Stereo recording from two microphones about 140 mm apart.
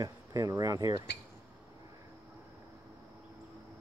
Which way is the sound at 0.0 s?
25° right (ahead or behind).